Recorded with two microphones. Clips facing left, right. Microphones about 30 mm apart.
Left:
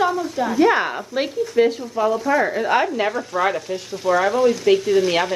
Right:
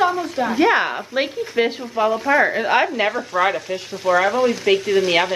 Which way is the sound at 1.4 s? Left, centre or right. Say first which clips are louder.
Left 3 dB; right.